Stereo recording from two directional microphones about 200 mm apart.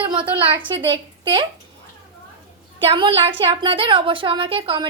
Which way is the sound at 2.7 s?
25° right (ahead or behind).